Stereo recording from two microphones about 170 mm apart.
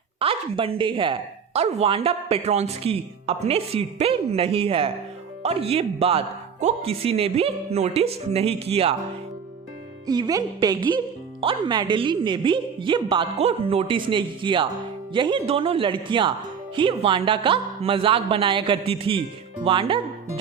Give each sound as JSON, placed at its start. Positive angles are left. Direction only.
{"t": 0.2, "sound": "speech", "side_deg": -35}
{"t": 10.1, "sound": "speech", "side_deg": -20}